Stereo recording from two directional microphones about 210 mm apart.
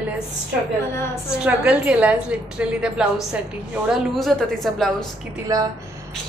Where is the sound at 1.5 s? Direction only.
5° right (ahead or behind).